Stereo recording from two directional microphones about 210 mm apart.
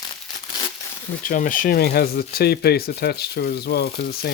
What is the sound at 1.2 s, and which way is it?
Speech, 40° left (ahead or behind).